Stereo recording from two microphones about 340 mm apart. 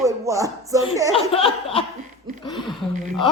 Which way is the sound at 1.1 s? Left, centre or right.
Centre.